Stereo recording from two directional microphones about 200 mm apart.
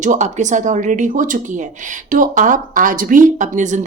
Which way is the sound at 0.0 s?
35° right (ahead or behind).